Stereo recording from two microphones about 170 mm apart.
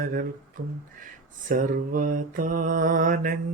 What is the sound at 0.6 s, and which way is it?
Speech, 60° right (ahead or behind).